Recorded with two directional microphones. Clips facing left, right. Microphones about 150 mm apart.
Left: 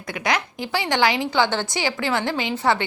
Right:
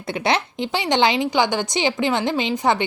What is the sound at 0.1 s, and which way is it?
A woman's voice, 25° right (ahead or behind).